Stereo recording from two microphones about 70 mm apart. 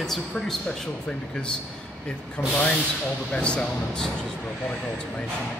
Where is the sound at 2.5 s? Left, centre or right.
Centre.